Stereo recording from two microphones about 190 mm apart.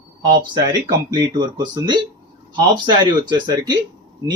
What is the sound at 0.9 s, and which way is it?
Speech, 20° right (ahead or behind).